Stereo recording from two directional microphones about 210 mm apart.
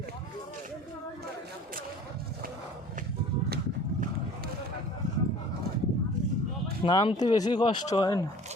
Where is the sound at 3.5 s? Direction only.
45° right (ahead or behind).